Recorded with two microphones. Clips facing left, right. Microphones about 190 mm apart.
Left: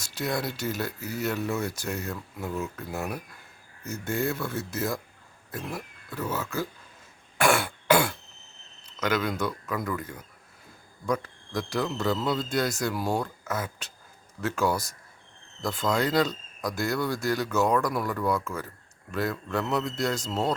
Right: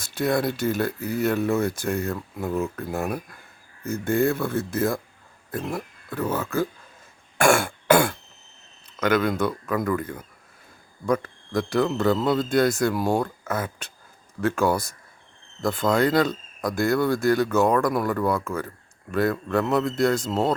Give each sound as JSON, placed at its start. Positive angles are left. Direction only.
{"t": 0.0, "sound": "speech", "side_deg": -55}
{"t": 7.3, "sound": "throat clearing", "side_deg": -50}
{"t": 9.0, "sound": "speech", "side_deg": -55}